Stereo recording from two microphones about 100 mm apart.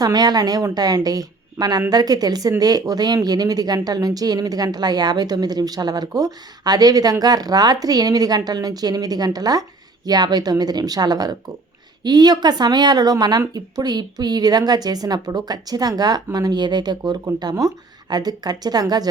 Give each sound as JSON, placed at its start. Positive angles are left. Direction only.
{"t": 0.0, "sound": "speech", "side_deg": -40}